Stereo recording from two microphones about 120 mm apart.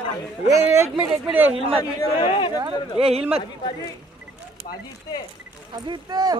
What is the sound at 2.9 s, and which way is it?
Speech, 55° right (ahead or behind).